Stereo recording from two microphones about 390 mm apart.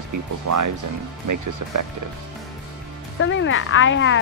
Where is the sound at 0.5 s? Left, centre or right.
Right.